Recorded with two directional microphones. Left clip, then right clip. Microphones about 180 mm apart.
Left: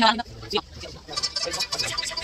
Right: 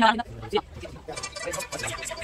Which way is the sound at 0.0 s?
10° left (ahead or behind).